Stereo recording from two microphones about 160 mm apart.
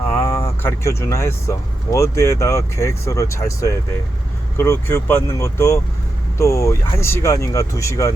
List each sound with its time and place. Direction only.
0.1 s speech: 15° left (ahead or behind)